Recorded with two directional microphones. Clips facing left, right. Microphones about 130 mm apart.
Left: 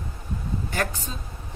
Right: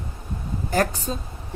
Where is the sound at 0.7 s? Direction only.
40° right (ahead or behind).